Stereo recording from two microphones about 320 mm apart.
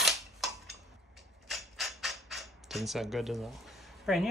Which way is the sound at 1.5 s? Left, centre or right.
Centre.